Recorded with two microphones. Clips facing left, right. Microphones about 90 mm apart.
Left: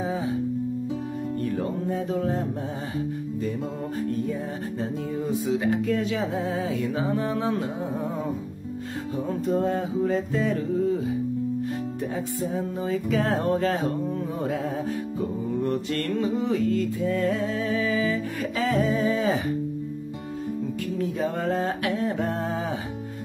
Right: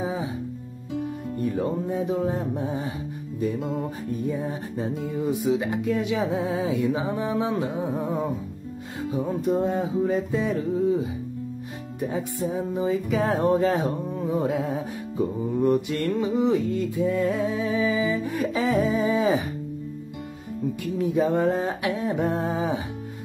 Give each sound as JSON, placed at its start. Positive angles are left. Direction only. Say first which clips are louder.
{"t": 1.4, "sound": "music", "louder": "right 4 dB", "side_deg": -15}
{"t": 4.1, "sound": "speech", "louder": "right 1 dB", "side_deg": -15}
{"t": 9.8, "sound": "music", "louder": "right 1 dB", "side_deg": -15}
{"t": 12.0, "sound": "speech", "louder": "right 6 dB", "side_deg": -15}
{"t": 13.2, "sound": "music", "louder": "right 4 dB", "side_deg": -15}
{"t": 21.0, "sound": "speech", "louder": "right 6 dB", "side_deg": -20}